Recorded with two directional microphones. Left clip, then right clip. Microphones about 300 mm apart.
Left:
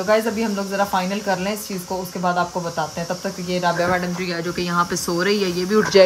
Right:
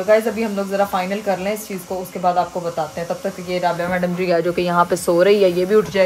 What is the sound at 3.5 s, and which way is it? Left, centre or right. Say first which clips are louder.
Speech: left 1 dB; centre.